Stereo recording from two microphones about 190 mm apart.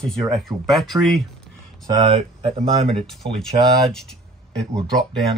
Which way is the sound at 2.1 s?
30° right (ahead or behind).